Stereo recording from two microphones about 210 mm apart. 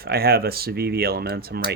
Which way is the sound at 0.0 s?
45° right (ahead or behind).